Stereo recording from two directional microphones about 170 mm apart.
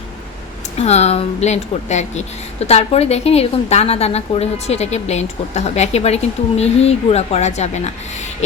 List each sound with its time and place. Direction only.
0.8 s a woman's voice: 40° left (ahead or behind)